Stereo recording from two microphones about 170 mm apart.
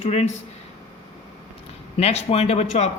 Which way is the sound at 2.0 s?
40° left (ahead or behind).